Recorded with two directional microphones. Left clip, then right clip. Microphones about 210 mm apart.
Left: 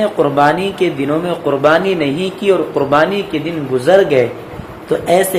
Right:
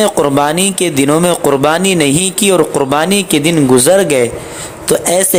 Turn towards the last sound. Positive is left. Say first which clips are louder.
# right 1 dB
turn(degrees=-60)  # may be behind; listen again after turning